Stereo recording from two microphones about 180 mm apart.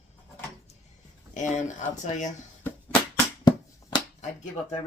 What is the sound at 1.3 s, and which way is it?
Speech, 40° left (ahead or behind).